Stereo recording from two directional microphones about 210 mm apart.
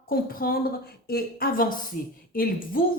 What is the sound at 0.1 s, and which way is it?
A woman's voice, 45° left (ahead or behind).